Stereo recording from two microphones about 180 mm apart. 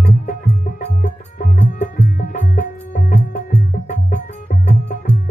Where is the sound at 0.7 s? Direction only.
45° left (ahead or behind).